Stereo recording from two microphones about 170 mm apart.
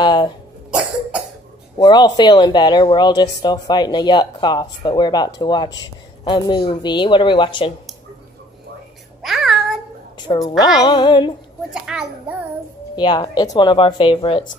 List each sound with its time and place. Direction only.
0.0 s cough: 25° left (ahead or behind)
0.7 s cough: 5° right (ahead or behind)
1.8 s speech: 25° left (ahead or behind)
9.2 s a sound: centre (ahead or behind)
10.1 s a sound: 30° left (ahead or behind)
10.8 s speech: 25° left (ahead or behind)
11.7 s a child's voice: 5° right (ahead or behind)
12.9 s speech: 25° left (ahead or behind)